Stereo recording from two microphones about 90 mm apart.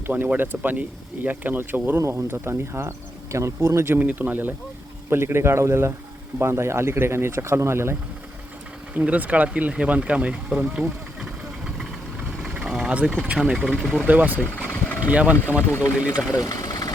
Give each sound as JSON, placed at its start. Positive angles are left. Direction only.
{"t": 0.1, "sound": "speech", "side_deg": -20}
{"t": 9.0, "sound": "speech", "side_deg": -15}
{"t": 14.7, "sound": "vehicle", "side_deg": 15}
{"t": 15.0, "sound": "speech", "side_deg": -15}
{"t": 16.4, "sound": "engine", "side_deg": 40}